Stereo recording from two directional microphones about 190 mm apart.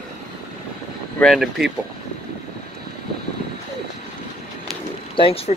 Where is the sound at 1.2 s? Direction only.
Centre (ahead or behind).